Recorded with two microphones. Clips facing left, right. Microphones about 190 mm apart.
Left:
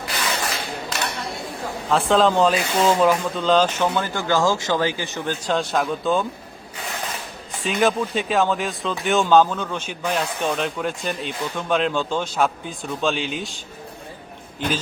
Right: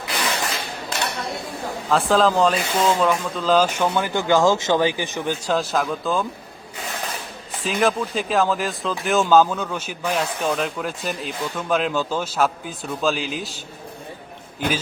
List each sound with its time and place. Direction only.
1.9 s speech: centre (ahead or behind)
5.5 s speech: centre (ahead or behind)
7.6 s speech: centre (ahead or behind)